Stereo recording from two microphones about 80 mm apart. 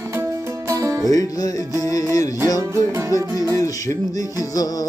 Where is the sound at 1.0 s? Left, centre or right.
Left.